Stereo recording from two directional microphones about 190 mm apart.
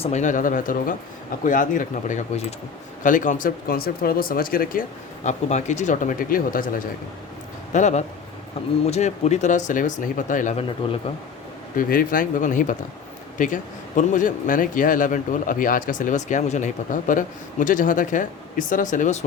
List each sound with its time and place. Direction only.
0.0 s speech: 40° left (ahead or behind)
11.8 s speech: 45° left (ahead or behind)